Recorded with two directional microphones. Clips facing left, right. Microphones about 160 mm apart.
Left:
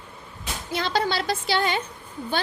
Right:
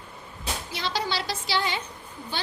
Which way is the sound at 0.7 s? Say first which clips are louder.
Left 6 dB; 50° left (ahead or behind).